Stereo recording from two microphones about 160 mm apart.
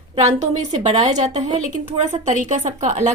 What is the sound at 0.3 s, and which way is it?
A woman's voice, 45° right (ahead or behind).